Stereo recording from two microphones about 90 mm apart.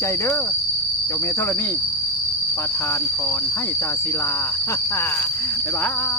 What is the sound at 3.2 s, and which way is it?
Cricket, 25° left (ahead or behind).